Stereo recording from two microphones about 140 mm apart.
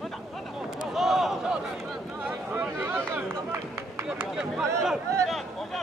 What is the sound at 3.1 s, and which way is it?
Run, 15° right (ahead or behind).